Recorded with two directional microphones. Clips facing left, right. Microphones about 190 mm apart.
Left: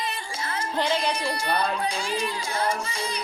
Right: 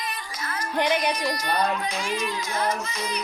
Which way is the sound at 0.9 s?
30° left (ahead or behind).